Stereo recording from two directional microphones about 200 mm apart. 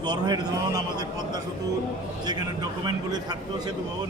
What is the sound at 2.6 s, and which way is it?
A man's voice, 20° right (ahead or behind).